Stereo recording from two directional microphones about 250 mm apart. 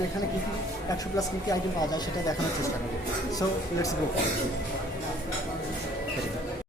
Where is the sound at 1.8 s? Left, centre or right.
Centre.